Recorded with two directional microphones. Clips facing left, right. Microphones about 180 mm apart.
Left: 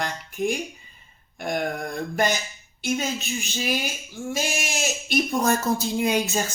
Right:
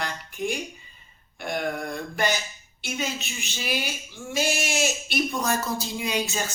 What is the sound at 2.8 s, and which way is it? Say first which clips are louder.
Speech: left 5 dB; 40° left (ahead or behind).